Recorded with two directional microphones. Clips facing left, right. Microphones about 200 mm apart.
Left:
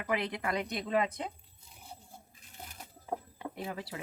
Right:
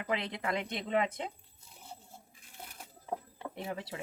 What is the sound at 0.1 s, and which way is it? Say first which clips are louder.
Speech: left 2 dB; 25° right (ahead or behind).